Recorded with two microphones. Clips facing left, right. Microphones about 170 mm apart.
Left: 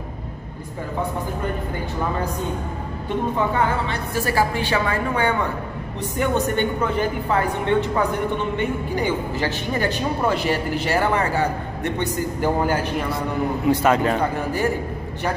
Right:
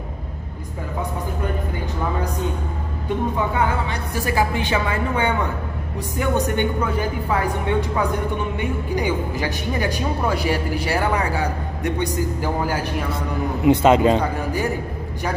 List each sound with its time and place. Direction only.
3.5 s speech: 15° right (ahead or behind)
13.7 s speech: 20° right (ahead or behind)